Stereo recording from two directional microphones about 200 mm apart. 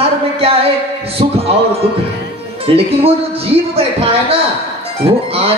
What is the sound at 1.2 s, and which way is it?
Heart sounds, 30° right (ahead or behind).